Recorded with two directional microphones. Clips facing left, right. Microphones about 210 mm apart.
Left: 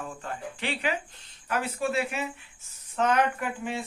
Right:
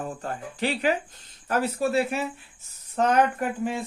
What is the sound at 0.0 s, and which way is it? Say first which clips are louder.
Speech: right 4 dB; 40° right (ahead or behind).